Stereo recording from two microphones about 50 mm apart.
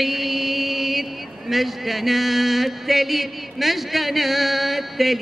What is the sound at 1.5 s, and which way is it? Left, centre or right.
Speech, centre.